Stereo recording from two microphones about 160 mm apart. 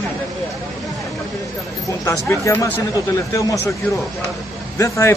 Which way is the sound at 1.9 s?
20° left (ahead or behind).